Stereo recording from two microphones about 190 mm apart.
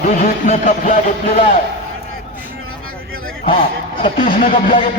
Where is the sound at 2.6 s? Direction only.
90° right.